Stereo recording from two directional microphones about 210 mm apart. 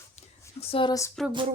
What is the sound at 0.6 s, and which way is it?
Speech, 25° left (ahead or behind).